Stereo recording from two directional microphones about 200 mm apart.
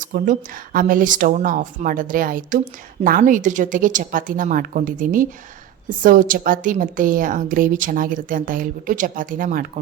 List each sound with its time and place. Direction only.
0.0 s a woman's voice: 40° right (ahead or behind)